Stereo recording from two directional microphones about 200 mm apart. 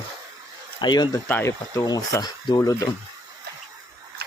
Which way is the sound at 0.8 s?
20° left (ahead or behind).